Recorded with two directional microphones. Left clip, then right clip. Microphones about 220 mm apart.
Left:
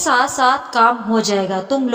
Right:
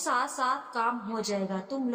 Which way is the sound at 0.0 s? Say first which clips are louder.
Left 14 dB; 40° left (ahead or behind).